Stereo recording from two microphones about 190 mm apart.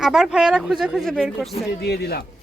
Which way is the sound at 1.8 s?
55° left (ahead or behind).